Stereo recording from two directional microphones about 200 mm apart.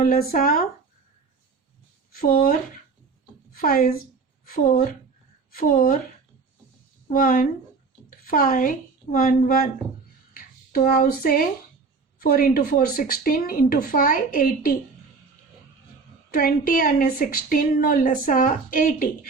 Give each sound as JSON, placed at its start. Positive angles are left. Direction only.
{"t": 0.0, "sound": "a woman's voice", "side_deg": 45}
{"t": 2.1, "sound": "a woman's voice", "side_deg": 45}
{"t": 7.1, "sound": "a woman's voice", "side_deg": 45}
{"t": 16.3, "sound": "a woman's voice", "side_deg": 45}